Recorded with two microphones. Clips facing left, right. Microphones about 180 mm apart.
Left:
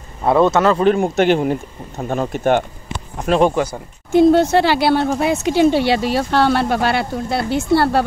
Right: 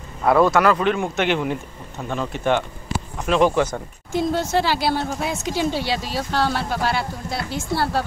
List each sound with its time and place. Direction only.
0.2 s speech: 25° left (ahead or behind)
0.8 s speech: 40° left (ahead or behind)
3.4 s speech: 15° left (ahead or behind)
4.1 s speech: 65° left (ahead or behind)